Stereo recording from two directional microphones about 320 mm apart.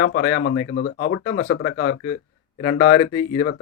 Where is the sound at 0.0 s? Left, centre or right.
Left.